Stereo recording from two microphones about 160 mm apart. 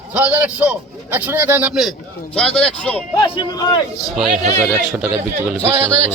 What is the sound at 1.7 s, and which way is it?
A man's voice, centre (ahead or behind).